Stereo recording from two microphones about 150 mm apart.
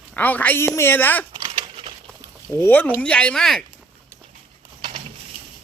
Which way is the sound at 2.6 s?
10° left (ahead or behind).